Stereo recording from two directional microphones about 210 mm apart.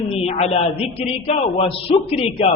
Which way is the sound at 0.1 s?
30° left (ahead or behind).